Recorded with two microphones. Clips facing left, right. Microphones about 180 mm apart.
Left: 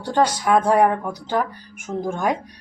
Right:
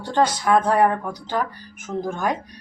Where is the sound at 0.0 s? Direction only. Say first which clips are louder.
Left 1 dB; 10° left (ahead or behind).